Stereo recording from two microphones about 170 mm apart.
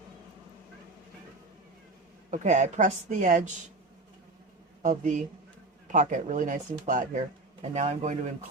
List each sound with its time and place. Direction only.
2.3 s speech: 45° right (ahead or behind)
4.8 s speech: 50° right (ahead or behind)